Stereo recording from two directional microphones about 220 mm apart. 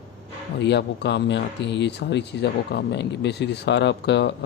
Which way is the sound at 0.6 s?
50° left (ahead or behind).